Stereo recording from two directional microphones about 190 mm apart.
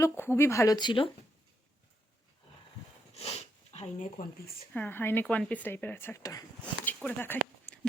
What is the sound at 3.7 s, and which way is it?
Speech, 35° left (ahead or behind).